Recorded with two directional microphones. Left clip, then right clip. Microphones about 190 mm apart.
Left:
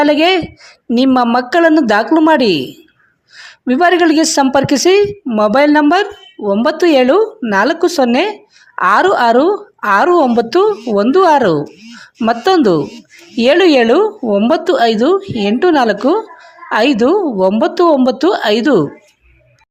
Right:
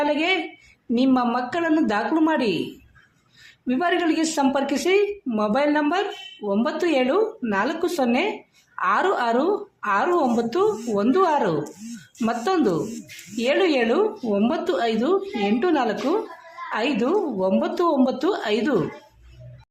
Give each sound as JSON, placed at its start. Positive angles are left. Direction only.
{"t": 0.0, "sound": "a woman's voice", "side_deg": 50}